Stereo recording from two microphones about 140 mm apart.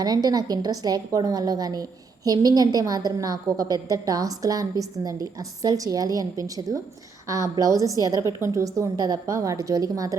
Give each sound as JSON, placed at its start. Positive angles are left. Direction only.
{"t": 0.0, "sound": "a woman's voice", "side_deg": -30}